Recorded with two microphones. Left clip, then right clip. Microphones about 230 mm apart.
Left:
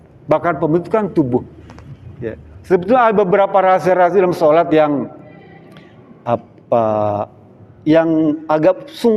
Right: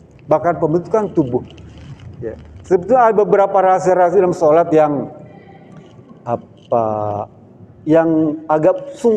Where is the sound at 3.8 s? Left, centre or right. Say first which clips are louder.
Even; left.